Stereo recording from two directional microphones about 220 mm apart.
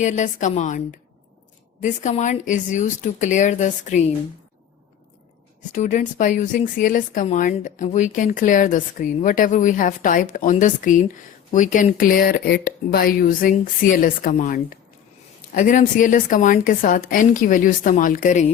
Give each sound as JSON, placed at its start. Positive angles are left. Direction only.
{"t": 0.0, "sound": "speech", "side_deg": 35}
{"t": 5.7, "sound": "speech", "side_deg": 35}